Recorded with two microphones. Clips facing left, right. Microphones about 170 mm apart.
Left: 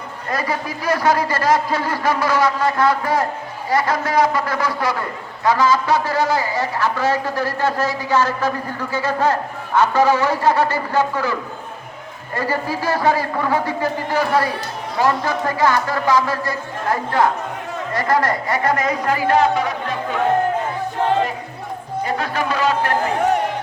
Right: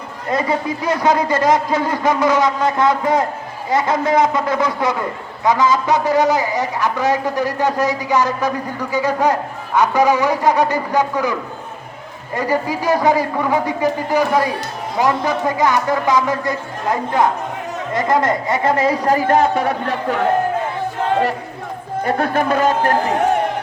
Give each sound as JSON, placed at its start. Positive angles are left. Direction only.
{"t": 0.3, "sound": "a man's voice", "side_deg": -25}
{"t": 22.0, "sound": "speech", "side_deg": -55}